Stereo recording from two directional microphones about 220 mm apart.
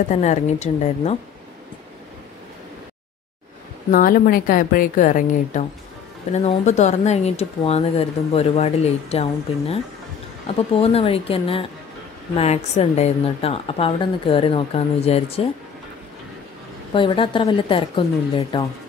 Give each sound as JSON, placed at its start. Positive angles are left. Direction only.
{"t": 0.1, "sound": "speech", "side_deg": 30}
{"t": 3.9, "sound": "a woman's voice", "side_deg": 40}
{"t": 16.9, "sound": "a woman's voice", "side_deg": 20}